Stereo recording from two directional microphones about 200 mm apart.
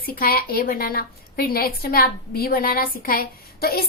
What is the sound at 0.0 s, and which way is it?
A woman's voice, 45° left (ahead or behind).